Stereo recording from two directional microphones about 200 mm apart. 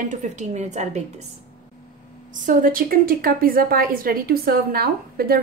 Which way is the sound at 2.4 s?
45° right (ahead or behind).